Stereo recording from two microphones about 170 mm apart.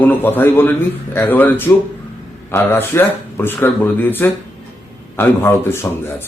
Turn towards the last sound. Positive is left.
turn(degrees=15)  # may be behind; listen again after turning